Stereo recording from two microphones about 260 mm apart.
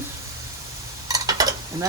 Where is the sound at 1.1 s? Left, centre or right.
Centre.